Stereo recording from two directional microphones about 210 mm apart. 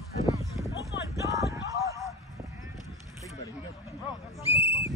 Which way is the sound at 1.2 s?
15° right (ahead or behind).